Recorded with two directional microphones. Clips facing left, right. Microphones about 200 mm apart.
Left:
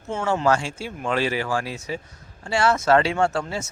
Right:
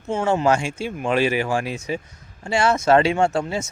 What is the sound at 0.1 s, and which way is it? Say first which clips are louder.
Speech: right 2 dB; 15° right (ahead or behind).